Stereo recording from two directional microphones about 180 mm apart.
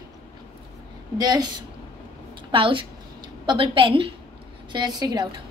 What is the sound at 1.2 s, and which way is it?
Speech, 20° right (ahead or behind).